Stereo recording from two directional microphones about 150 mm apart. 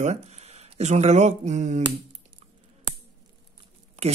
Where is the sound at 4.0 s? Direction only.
45° right (ahead or behind).